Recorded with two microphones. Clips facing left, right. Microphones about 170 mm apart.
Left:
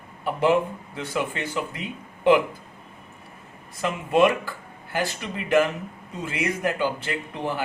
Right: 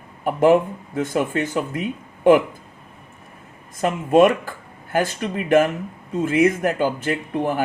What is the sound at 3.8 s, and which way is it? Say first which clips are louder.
A man's voice: right 5 dB; 50° right (ahead or behind).